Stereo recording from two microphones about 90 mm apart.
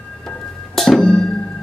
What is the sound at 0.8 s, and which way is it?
Music, 5° left (ahead or behind).